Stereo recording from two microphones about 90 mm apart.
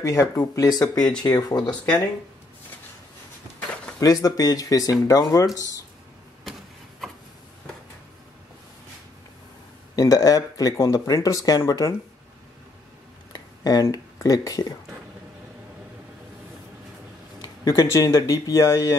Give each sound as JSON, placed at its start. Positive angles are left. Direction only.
{"t": 0.0, "sound": "speech", "side_deg": 35}
{"t": 4.0, "sound": "speech", "side_deg": 45}
{"t": 9.9, "sound": "speech", "side_deg": 40}
{"t": 13.3, "sound": "a sound", "side_deg": 45}
{"t": 14.2, "sound": "speech", "side_deg": 40}
{"t": 17.6, "sound": "speech", "side_deg": 40}